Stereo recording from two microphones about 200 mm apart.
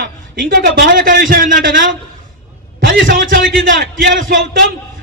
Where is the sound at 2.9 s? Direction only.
45° right (ahead or behind).